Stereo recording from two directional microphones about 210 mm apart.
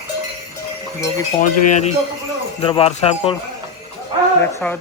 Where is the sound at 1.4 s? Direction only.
35° left (ahead or behind).